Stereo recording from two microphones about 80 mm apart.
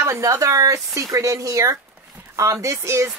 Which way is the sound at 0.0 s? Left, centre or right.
Right.